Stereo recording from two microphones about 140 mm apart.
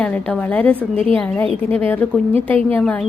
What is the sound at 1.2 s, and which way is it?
A woman's voice, 15° left (ahead or behind).